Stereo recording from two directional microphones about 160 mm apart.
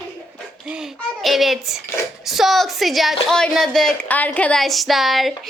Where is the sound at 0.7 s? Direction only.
Centre (ahead or behind).